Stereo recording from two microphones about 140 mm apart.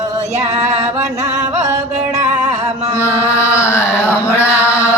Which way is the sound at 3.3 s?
20° left (ahead or behind).